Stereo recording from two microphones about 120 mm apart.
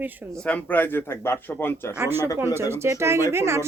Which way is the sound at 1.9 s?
20° right (ahead or behind).